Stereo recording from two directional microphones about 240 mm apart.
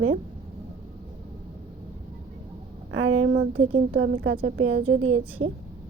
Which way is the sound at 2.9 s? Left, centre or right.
Right.